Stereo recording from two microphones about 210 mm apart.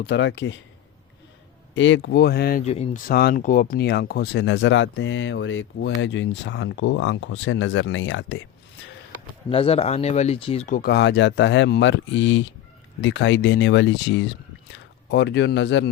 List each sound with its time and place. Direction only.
0.0 s speech: 55° left (ahead or behind)
1.7 s speech: 60° left (ahead or behind)
2.6 s speech: 30° left (ahead or behind)
3.1 s speech: 45° left (ahead or behind); by 8.4 s 65° left (ahead or behind)
9.5 s speech: 25° left (ahead or behind)
10.8 s speech: 50° left (ahead or behind)